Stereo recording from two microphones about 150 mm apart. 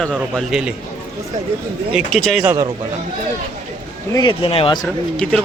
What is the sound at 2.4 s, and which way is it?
Speech, 15° right (ahead or behind).